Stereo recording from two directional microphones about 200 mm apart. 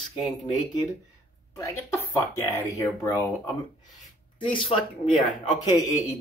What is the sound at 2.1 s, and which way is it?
Speech, 15° left (ahead or behind).